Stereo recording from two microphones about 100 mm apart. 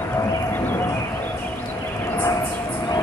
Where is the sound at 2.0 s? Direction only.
25° left (ahead or behind).